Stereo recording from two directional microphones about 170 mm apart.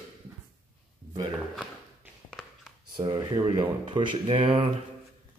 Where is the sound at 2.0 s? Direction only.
10° right (ahead or behind).